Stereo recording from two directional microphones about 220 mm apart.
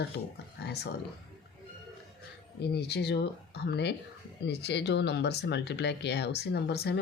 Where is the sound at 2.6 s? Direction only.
50° left (ahead or behind).